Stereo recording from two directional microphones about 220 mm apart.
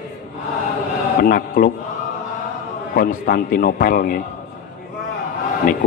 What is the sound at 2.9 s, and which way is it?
A man's voice, 40° left (ahead or behind).